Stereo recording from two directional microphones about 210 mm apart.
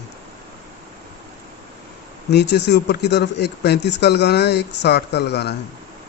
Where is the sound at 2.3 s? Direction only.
55° left (ahead or behind).